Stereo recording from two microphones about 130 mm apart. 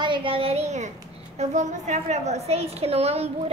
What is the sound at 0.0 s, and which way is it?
A child's voice, 40° right (ahead or behind).